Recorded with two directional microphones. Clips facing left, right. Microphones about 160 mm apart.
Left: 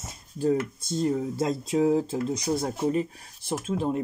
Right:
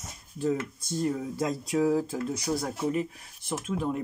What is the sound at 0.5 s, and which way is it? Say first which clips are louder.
Speech: left 4 dB; 25° left (ahead or behind).